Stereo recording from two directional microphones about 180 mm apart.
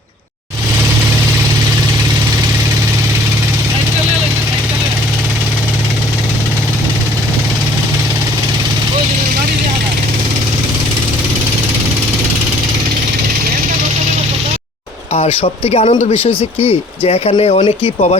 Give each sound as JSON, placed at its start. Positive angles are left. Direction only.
{"t": 15.1, "sound": "speech", "side_deg": 35}